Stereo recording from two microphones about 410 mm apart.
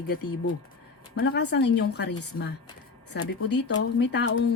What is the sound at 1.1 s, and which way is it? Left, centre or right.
Speech, left.